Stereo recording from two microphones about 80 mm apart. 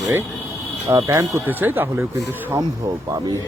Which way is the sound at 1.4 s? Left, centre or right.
Right.